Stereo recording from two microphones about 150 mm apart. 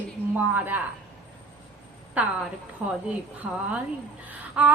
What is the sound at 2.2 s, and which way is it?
Speech, 10° right (ahead or behind).